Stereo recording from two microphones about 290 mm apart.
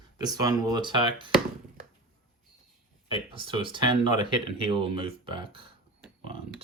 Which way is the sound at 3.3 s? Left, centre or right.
Centre.